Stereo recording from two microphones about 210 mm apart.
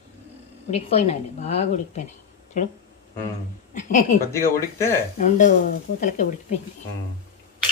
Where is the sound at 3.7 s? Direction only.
35° left (ahead or behind).